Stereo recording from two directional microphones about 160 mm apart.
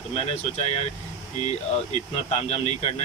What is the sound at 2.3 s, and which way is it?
Speech, 40° left (ahead or behind).